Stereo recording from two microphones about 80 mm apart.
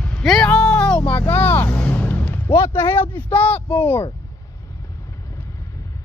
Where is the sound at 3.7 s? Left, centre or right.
Left.